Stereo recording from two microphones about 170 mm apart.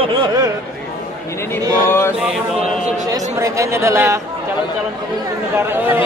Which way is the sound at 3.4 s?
15° right (ahead or behind).